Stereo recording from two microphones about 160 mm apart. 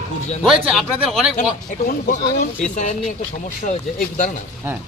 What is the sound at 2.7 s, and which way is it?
Speech, 50° left (ahead or behind).